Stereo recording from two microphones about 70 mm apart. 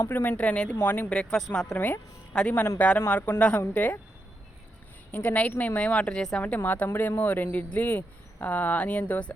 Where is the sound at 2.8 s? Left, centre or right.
Left.